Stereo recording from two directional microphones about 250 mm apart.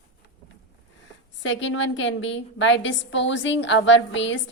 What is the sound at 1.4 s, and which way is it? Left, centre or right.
A woman's voice, left.